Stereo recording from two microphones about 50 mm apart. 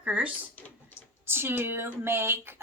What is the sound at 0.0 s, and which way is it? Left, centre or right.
Speech, right.